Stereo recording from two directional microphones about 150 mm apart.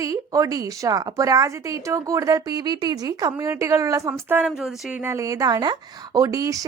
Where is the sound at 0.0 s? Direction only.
20° right (ahead or behind).